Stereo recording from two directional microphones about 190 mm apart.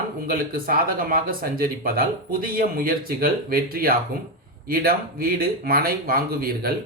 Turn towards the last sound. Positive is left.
turn(degrees=-50)  # may be behind; listen again after turning